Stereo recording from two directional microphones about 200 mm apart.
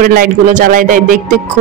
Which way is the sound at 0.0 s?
45° right (ahead or behind).